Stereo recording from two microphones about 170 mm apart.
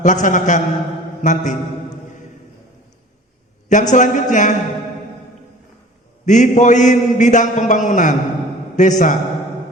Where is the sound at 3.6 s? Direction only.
45° left (ahead or behind).